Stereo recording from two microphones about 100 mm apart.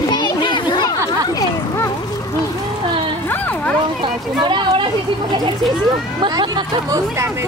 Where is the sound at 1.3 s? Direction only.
30° left (ahead or behind).